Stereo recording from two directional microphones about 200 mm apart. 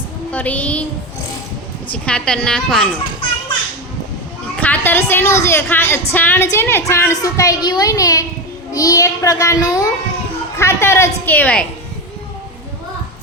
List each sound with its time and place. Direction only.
0.3 s a woman's voice: 5° left (ahead or behind)
1.9 s a woman's voice: 5° left (ahead or behind)
4.5 s a woman's voice: 10° left (ahead or behind)